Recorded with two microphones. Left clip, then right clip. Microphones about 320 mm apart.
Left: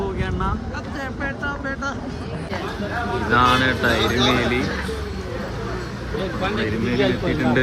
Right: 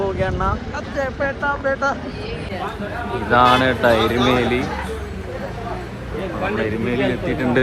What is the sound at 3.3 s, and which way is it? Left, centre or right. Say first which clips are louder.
Speech: right 3 dB; centre.